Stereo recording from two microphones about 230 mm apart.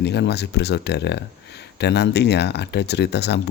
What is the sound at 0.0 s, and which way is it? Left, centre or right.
Speech, left.